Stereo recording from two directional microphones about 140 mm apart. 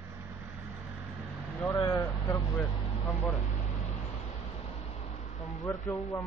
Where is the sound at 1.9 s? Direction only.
15° left (ahead or behind).